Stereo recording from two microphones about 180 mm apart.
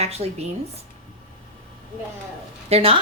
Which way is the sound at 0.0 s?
35° right (ahead or behind).